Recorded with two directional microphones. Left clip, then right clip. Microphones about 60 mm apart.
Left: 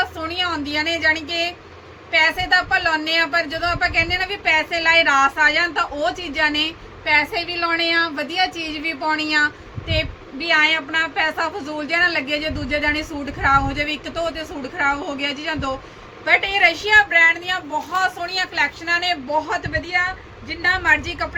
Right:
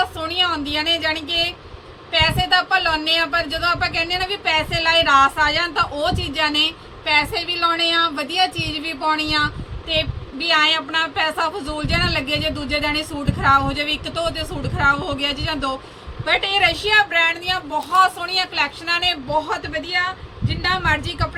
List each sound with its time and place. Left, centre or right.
0.0 s a woman's voice: centre